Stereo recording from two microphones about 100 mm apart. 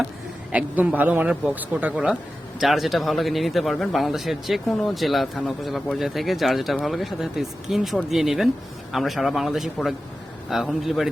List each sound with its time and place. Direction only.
0.5 s speech: 15° right (ahead or behind)
2.6 s a man's voice: centre (ahead or behind)